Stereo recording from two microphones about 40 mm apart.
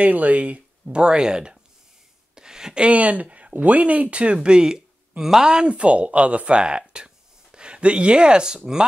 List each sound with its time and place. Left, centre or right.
0.0 s speech: right
2.3 s a sound: centre
2.8 s speech: right